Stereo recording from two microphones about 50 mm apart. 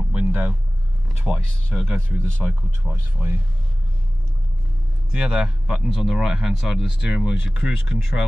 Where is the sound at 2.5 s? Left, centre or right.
Right.